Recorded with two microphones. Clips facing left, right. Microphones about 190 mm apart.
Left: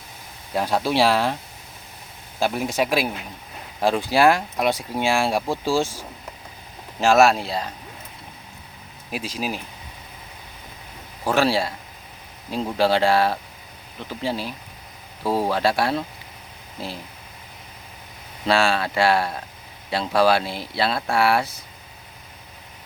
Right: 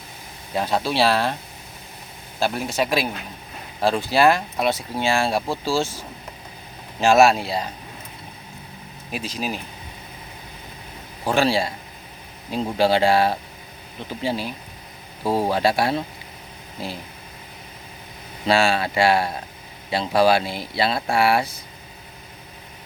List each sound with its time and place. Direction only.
0.5 s speech: 10° left (ahead or behind)
2.4 s speech: 15° left (ahead or behind)
7.0 s speech: centre (ahead or behind)
9.1 s speech: 5° left (ahead or behind)
11.3 s speech: 5° left (ahead or behind)
12.7 s speech: centre (ahead or behind)
18.4 s speech: centre (ahead or behind)